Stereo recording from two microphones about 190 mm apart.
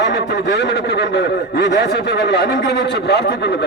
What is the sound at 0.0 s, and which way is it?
Speech, 65° left (ahead or behind).